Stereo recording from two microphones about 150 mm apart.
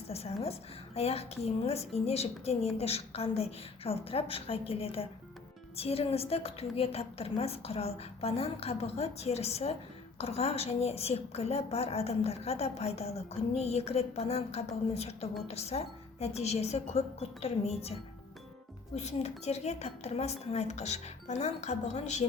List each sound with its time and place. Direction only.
0.1 s a woman's voice: 45° left (ahead or behind)